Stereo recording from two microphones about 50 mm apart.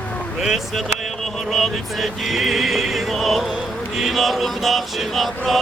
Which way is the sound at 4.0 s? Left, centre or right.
Centre.